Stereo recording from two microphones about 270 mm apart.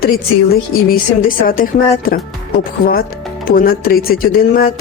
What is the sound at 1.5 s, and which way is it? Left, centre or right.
Speech, left.